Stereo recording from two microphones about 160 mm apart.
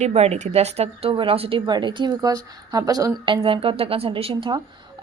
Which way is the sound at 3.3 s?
35° right (ahead or behind).